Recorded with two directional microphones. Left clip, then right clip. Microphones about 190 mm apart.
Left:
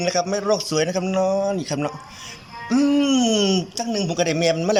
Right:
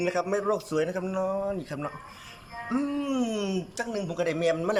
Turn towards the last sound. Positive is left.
turn(degrees=5)  # may be behind; listen again after turning